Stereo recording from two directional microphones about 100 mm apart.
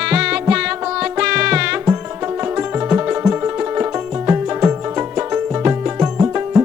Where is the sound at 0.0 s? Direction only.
10° right (ahead or behind).